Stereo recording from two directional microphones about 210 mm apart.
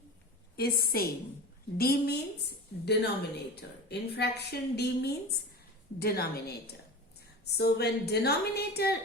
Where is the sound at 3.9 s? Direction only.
50° left (ahead or behind).